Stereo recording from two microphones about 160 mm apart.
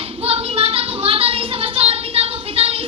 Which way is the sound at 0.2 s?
35° right (ahead or behind).